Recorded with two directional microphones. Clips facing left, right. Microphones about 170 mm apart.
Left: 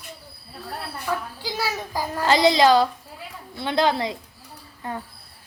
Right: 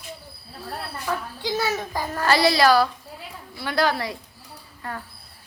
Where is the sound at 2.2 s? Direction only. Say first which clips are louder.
Left 2 dB; 20° left (ahead or behind).